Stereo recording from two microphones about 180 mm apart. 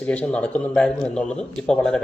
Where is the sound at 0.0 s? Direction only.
5° left (ahead or behind).